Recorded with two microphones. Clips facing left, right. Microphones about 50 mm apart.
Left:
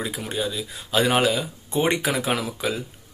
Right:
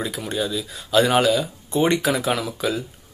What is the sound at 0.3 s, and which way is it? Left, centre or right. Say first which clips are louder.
Speech: right 3 dB; centre.